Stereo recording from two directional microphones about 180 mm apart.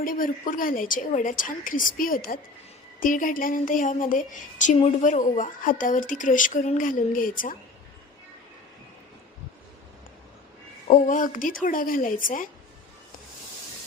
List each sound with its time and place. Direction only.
0.0 s speech: 50° left (ahead or behind)
10.8 s speech: 45° left (ahead or behind)